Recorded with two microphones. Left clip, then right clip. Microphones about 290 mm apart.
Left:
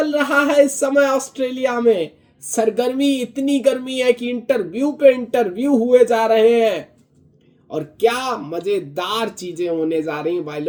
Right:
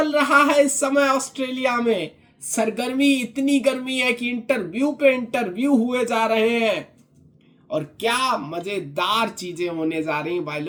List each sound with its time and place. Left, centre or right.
0.0 s a woman's voice: centre
1.0 s speech: right
1.4 s a man's voice: centre